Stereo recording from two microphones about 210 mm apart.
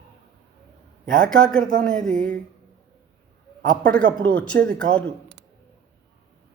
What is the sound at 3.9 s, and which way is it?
Speech, 5° left (ahead or behind).